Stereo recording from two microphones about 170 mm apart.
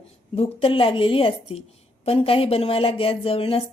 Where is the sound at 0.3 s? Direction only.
30° left (ahead or behind).